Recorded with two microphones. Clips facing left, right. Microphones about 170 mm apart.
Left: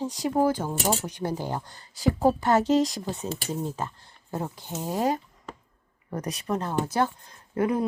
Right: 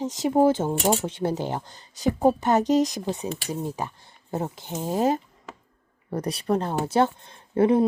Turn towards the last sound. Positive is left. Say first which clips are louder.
# right 6 dB
turn(degrees=-30)  # may be behind; listen again after turning